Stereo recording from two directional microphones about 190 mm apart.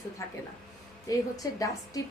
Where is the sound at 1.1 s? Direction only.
20° left (ahead or behind).